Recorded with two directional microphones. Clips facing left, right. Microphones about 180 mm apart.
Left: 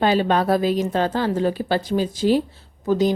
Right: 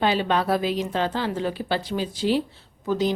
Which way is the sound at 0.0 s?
45° left (ahead or behind).